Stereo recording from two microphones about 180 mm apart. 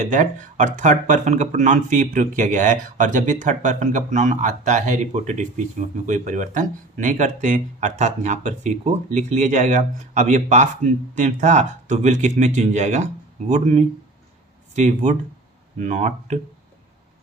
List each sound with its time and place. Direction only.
0.0 s speech: 45° right (ahead or behind)